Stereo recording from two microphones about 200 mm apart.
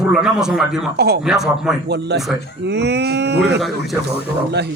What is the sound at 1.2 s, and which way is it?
Speech, 5° right (ahead or behind).